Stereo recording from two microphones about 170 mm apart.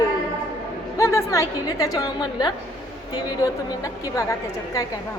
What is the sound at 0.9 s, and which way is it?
A woman's voice, 15° left (ahead or behind).